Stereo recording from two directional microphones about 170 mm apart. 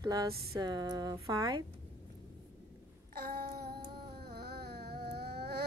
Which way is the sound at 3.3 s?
70° right (ahead or behind).